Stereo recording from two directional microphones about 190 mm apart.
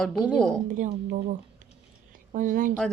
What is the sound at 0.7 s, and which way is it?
Speech, 45° right (ahead or behind).